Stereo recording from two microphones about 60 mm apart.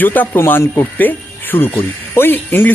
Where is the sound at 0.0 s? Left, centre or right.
Left.